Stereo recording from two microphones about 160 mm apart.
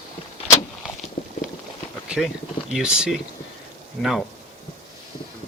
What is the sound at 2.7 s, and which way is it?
Speech, 5° right (ahead or behind).